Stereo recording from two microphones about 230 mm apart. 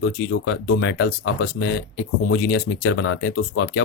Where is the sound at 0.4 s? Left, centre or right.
Left.